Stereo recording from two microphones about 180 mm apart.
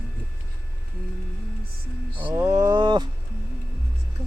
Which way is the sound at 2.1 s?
10° right (ahead or behind).